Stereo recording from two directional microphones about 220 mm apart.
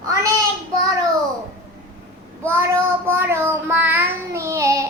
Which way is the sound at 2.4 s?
10° right (ahead or behind).